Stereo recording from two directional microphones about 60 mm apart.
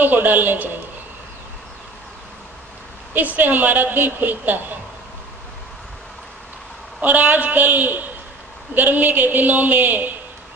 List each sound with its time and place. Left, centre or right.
0.0 s a man's voice: right
3.1 s a woman's voice: right
7.0 s a woman's voice: right